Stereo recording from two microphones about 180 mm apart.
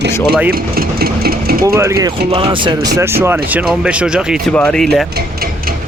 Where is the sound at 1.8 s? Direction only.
15° right (ahead or behind).